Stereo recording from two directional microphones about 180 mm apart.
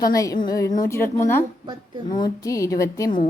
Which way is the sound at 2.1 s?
25° left (ahead or behind).